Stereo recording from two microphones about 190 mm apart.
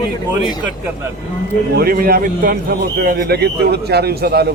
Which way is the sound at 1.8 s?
50° right (ahead or behind).